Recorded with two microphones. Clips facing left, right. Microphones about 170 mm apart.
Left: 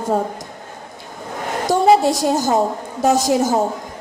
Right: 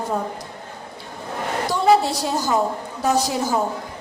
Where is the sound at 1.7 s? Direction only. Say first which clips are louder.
Left 4 dB; 45° left (ahead or behind).